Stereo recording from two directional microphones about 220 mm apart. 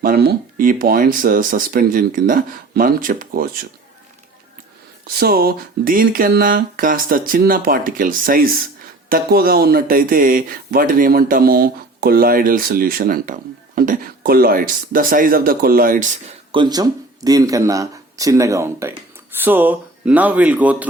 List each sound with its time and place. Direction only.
0.0 s speech: 45° right (ahead or behind)
5.0 s speech: 40° right (ahead or behind)
16.5 s speech: 20° right (ahead or behind)